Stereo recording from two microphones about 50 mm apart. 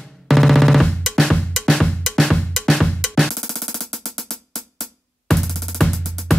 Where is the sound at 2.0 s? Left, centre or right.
Centre.